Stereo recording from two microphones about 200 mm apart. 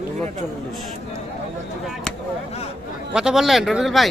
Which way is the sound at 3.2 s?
Centre (ahead or behind).